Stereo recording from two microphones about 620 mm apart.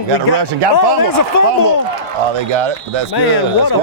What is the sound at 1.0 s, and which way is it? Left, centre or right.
Speech, left.